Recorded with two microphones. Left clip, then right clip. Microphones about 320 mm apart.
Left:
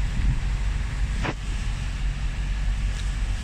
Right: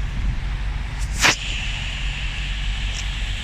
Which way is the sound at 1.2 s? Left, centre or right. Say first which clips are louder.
Right 15 dB; right.